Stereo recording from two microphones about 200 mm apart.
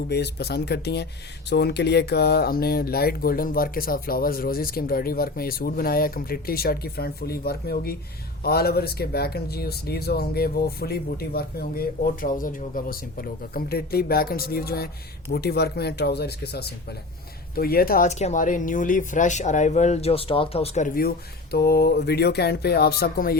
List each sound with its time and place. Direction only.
0.1 s speech: 55° left (ahead or behind)